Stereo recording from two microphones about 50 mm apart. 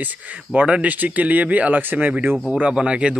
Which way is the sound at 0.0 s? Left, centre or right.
Right.